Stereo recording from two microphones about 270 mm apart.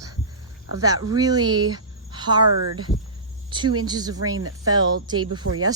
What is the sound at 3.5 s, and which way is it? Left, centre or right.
Speech, centre.